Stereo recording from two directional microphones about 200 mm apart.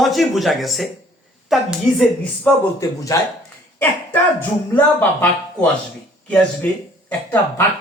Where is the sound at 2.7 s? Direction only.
15° left (ahead or behind).